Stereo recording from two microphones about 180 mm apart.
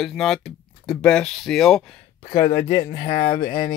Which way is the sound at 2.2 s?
20° left (ahead or behind).